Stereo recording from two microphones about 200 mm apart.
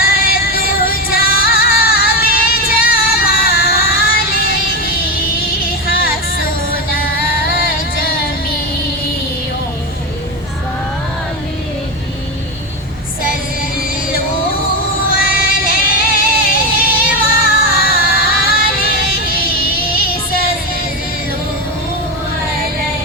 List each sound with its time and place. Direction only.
0.0 s music: 45° left (ahead or behind)
15.1 s music: 45° left (ahead or behind)